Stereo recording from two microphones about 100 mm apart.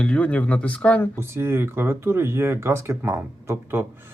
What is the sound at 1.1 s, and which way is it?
Speech, 25° right (ahead or behind).